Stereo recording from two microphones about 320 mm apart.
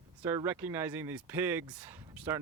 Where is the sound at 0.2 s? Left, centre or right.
Centre.